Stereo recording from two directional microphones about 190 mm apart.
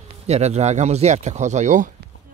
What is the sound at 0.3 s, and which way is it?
Speech, 35° right (ahead or behind).